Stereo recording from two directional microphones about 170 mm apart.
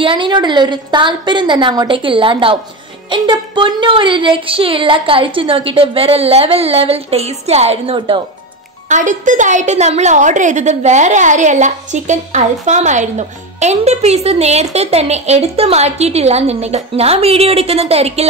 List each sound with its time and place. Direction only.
0.0 s a woman's voice: 30° right (ahead or behind)
8.8 s a woman's voice: 45° right (ahead or behind)